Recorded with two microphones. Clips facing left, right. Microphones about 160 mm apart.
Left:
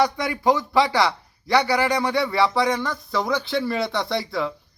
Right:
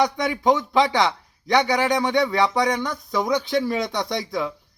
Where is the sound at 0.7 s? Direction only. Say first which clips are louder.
Even; 20° right (ahead or behind).